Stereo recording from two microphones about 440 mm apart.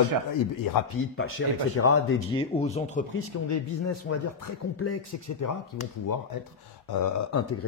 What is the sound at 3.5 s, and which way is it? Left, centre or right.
Speech, left.